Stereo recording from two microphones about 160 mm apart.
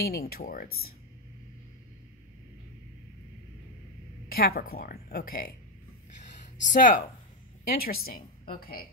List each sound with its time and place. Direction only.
0.0 s speech: 70° left (ahead or behind)
4.3 s speech: 70° left (ahead or behind)
6.7 s speech: 55° left (ahead or behind)
7.7 s speech: 70° left (ahead or behind)